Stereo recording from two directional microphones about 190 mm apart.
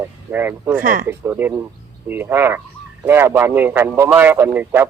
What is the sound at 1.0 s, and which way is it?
A man's voice, 15° right (ahead or behind).